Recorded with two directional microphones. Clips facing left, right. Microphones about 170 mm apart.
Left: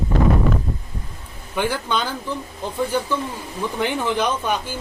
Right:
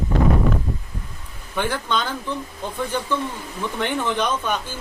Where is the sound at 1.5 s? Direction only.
10° left (ahead or behind).